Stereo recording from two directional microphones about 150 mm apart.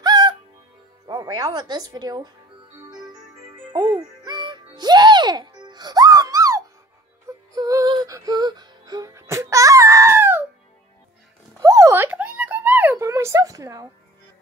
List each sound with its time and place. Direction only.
0.0 s music: 30° right (ahead or behind)
1.0 s speech: 25° right (ahead or behind)
3.7 s music: 25° right (ahead or behind)
11.6 s a sound: 20° right (ahead or behind)